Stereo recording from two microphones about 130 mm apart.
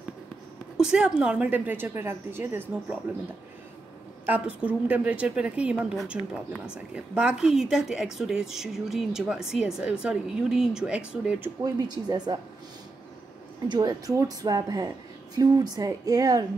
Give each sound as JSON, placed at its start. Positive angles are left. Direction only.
{"t": 0.7, "sound": "a woman's voice", "side_deg": -5}
{"t": 4.3, "sound": "a woman's voice", "side_deg": -10}
{"t": 11.6, "sound": "speech", "side_deg": -30}
{"t": 13.7, "sound": "speech", "side_deg": -30}